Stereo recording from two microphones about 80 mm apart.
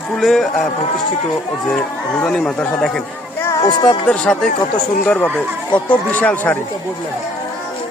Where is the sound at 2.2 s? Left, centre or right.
Centre.